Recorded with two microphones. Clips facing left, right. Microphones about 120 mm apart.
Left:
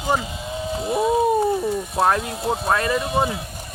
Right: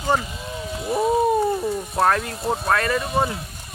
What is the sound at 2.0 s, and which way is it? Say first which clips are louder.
Speech: even; 15° left (ahead or behind).